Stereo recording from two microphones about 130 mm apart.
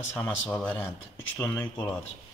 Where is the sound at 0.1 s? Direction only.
10° left (ahead or behind).